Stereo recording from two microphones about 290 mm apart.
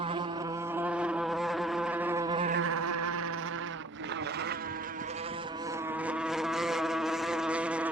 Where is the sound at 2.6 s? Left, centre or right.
Right.